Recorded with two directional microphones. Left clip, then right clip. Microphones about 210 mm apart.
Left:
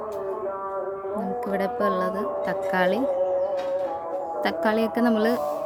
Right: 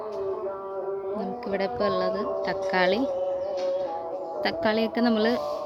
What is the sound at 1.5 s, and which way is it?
A woman's voice, 10° left (ahead or behind).